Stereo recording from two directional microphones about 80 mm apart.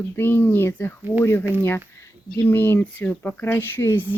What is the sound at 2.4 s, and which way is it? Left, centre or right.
Speech, left.